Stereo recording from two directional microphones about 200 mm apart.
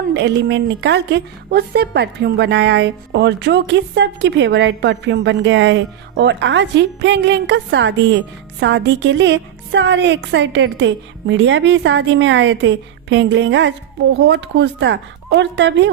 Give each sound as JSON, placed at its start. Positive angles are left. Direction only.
{"t": 0.1, "sound": "a woman's voice", "side_deg": -60}